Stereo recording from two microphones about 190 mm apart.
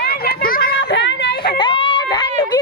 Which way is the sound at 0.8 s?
70° left (ahead or behind).